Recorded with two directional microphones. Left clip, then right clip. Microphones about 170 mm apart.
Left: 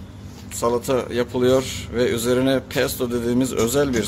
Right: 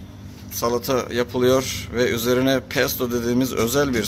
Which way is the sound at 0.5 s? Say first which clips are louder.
Left 1 dB; centre (ahead or behind).